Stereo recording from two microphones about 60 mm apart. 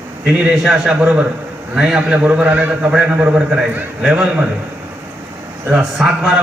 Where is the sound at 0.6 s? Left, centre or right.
Centre.